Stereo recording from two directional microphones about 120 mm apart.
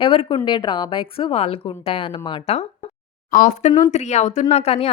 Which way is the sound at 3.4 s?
90° left.